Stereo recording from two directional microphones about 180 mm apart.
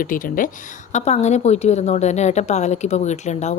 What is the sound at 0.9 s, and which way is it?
A woman's voice, 40° left (ahead or behind).